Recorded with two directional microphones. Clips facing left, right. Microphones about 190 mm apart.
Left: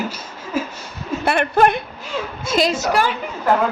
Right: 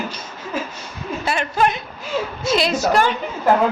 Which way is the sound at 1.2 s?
60° left (ahead or behind).